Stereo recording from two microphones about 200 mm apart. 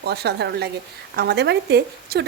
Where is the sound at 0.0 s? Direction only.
55° right (ahead or behind).